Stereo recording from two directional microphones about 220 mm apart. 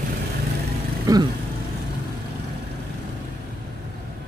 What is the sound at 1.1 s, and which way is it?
Vehicle, 15° right (ahead or behind).